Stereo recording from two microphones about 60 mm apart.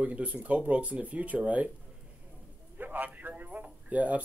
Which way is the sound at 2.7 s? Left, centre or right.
Right.